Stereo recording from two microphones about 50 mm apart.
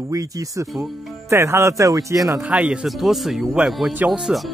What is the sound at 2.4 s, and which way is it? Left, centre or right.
Speech, right.